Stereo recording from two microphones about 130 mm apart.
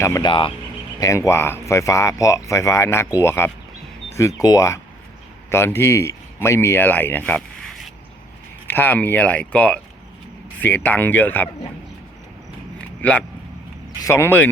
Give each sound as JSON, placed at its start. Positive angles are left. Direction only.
{"t": 0.2, "sound": "speech", "side_deg": 40}
{"t": 0.9, "sound": "speech", "side_deg": 25}
{"t": 8.6, "sound": "speech", "side_deg": 15}
{"t": 13.0, "sound": "speech", "side_deg": 10}